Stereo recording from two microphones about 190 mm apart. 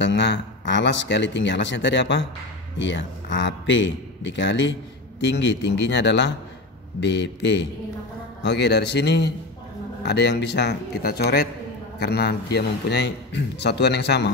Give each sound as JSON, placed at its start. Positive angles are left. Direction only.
{"t": 0.0, "sound": "a man's voice", "side_deg": 65}